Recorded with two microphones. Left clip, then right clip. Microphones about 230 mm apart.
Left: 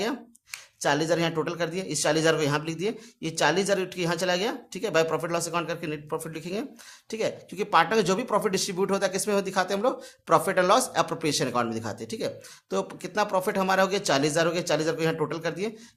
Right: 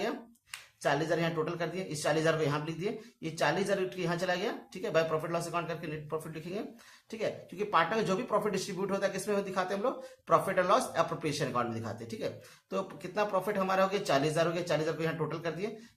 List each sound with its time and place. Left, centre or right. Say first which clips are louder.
0.8 s a man's voice: left 6 dB; left